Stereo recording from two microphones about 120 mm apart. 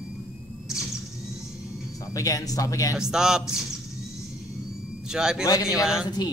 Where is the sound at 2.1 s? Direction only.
30° left (ahead or behind).